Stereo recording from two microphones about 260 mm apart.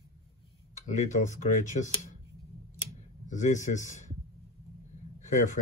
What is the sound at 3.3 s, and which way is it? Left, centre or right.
Speech, left.